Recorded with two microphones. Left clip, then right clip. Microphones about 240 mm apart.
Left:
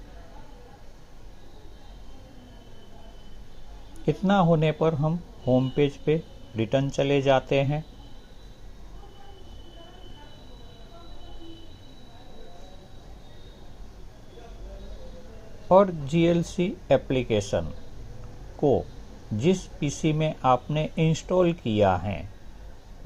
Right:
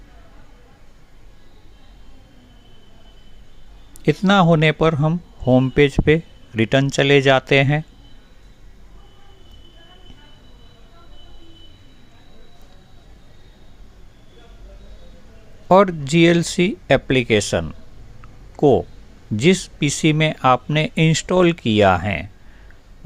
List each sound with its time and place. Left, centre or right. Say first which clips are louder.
4.0 s speech: right 7 dB; right
15.7 s speech: right 6 dB; right
19.4 s speech: right 8 dB; right